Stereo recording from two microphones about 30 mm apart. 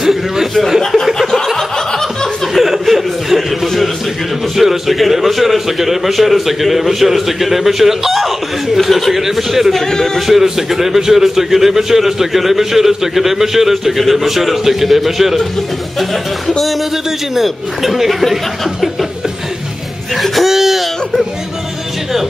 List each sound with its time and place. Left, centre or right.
0.0 s chuckle: centre
0.6 s speech: centre
1.1 s a sound: centre
2.5 s chuckle: centre
4.6 s a man's voice: centre
9.8 s a man's voice: centre
10.2 s a man's voice: centre
17.4 s speech: centre
20.2 s speech: centre
20.5 s whimper: centre